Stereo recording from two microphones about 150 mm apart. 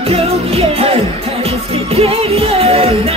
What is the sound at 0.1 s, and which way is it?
Music, 40° right (ahead or behind).